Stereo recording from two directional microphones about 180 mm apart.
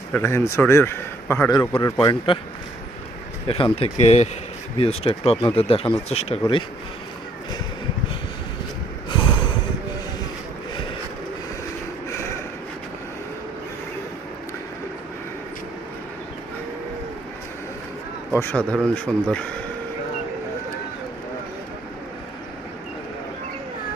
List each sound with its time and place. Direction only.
0.1 s speech: 15° left (ahead or behind)
3.4 s speech: 30° left (ahead or behind)
9.0 s snort: 25° left (ahead or behind)
12.1 s a sound: 15° left (ahead or behind)
18.3 s speech: 10° left (ahead or behind)